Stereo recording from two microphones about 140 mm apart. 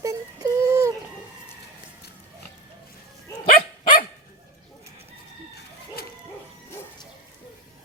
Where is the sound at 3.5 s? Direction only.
90° left.